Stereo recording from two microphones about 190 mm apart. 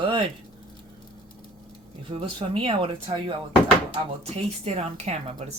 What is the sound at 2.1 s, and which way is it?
Speech, 30° right (ahead or behind).